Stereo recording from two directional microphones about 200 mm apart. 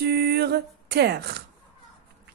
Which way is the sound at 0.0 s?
50° right (ahead or behind).